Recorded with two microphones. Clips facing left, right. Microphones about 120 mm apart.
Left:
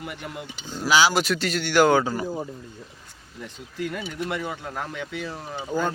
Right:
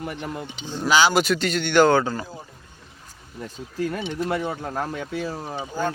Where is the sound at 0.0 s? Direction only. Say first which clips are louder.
Right 4 dB; 40° right (ahead or behind).